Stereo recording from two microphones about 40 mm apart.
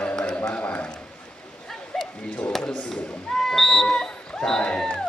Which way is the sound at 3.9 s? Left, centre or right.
Centre.